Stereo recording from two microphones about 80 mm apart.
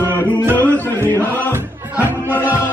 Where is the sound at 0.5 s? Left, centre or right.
Left.